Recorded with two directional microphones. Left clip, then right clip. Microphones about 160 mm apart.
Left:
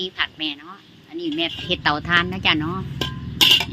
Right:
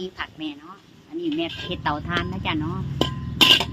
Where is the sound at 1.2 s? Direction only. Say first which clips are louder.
Left 2 dB; 35° left (ahead or behind).